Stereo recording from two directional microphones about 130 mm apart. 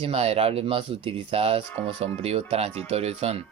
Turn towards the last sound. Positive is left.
turn(degrees=-50)  # may be behind; listen again after turning